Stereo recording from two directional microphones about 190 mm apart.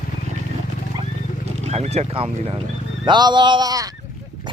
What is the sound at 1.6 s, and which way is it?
Speech, 35° right (ahead or behind).